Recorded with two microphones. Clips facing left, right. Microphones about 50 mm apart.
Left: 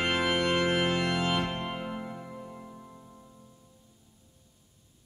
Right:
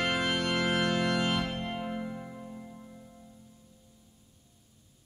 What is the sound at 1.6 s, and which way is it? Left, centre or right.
Music, centre.